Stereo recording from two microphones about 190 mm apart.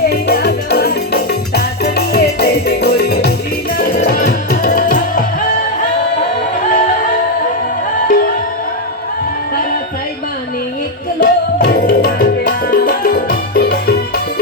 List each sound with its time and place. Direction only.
0.1 s music: 55° left (ahead or behind)
8.0 s music: 50° left (ahead or behind)
11.2 s music: 60° left (ahead or behind)